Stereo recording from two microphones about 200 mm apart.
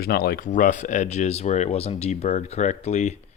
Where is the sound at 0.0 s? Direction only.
50° left (ahead or behind).